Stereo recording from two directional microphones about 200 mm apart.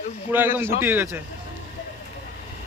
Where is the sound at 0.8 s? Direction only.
10° right (ahead or behind).